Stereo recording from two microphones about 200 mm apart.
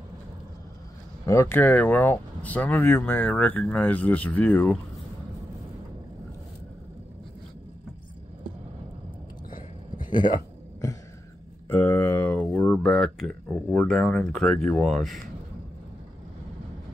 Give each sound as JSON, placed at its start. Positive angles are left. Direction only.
{"t": 1.2, "sound": "speech", "side_deg": 15}
{"t": 9.5, "sound": "a sound", "side_deg": 40}
{"t": 11.7, "sound": "speech", "side_deg": 10}